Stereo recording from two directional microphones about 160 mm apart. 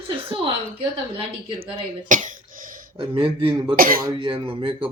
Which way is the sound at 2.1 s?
55° right (ahead or behind).